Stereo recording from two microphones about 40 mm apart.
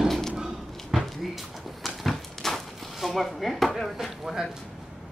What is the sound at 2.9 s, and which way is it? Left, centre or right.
Chopping, centre.